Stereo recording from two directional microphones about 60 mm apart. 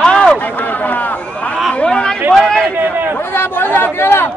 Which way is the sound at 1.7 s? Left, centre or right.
Centre.